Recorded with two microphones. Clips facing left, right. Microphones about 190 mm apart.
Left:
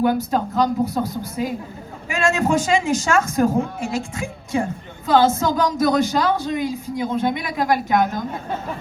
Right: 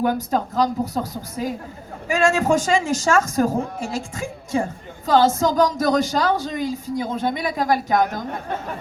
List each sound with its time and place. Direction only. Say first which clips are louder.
0.0 s speech: left 2 dB; 40° right (ahead or behind)